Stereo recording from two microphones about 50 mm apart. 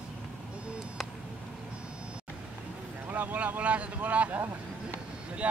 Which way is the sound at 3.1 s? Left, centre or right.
Right.